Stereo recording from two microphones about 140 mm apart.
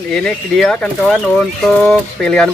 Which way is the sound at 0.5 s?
5° left (ahead or behind).